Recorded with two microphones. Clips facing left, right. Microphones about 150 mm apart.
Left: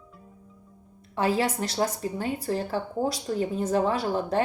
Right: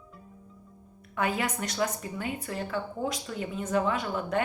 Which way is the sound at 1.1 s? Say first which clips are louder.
Left 5 dB; 30° left (ahead or behind).